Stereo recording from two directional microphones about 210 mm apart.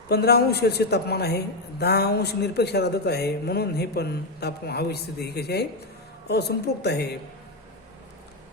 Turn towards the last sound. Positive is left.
turn(degrees=50)  # may be behind; listen again after turning